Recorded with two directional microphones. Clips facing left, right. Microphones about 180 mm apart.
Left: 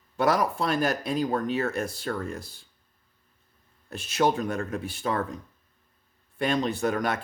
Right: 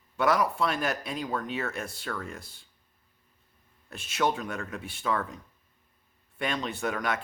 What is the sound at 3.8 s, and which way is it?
Speech, 40° left (ahead or behind).